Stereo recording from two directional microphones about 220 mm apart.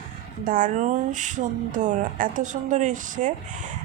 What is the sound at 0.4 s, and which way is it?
Speech, 35° right (ahead or behind).